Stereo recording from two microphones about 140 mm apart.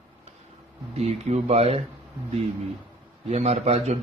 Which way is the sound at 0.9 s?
50° right (ahead or behind).